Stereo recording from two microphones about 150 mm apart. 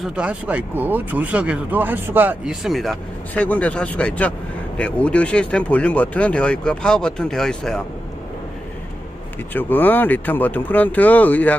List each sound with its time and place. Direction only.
0.0 s speech: 5° right (ahead or behind)
9.5 s speech: 15° left (ahead or behind)